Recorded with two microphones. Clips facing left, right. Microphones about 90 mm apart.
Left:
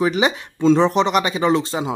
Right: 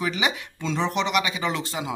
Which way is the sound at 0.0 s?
35° left (ahead or behind).